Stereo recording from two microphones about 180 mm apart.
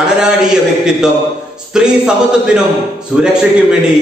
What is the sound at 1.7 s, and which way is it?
Speech, 5° right (ahead or behind).